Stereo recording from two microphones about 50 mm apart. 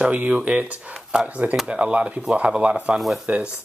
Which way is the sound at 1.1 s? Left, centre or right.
Centre.